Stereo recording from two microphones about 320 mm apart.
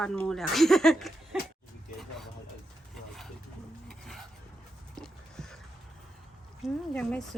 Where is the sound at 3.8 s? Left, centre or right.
Centre.